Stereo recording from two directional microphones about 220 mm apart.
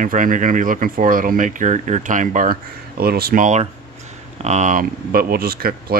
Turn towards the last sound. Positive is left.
turn(degrees=-40)  # may be behind; listen again after turning